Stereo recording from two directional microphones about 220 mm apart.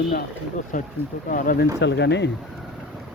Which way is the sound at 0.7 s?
40° left (ahead or behind).